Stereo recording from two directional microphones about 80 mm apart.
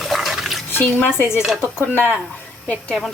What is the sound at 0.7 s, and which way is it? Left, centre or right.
Speech, left.